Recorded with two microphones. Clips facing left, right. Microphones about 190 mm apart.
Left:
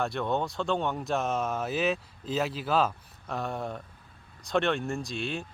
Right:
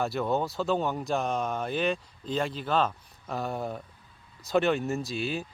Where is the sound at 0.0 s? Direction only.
5° right (ahead or behind).